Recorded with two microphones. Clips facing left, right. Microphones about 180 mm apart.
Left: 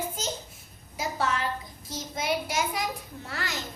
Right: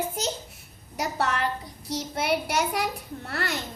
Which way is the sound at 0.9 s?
65° right (ahead or behind).